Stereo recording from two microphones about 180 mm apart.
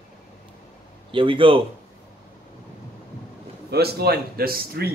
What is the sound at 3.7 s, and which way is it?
A man's voice, 65° right (ahead or behind).